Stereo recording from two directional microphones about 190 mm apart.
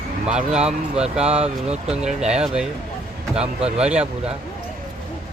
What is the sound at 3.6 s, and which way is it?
Speech, 35° right (ahead or behind).